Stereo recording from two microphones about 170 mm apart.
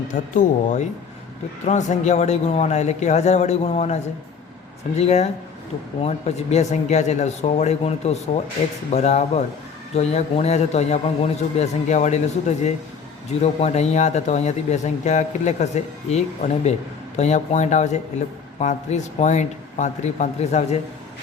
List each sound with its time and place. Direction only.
0.1 s speech: 45° left (ahead or behind)
4.9 s speech: 40° left (ahead or behind)